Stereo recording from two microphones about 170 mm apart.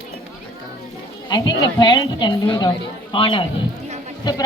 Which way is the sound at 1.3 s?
25° left (ahead or behind).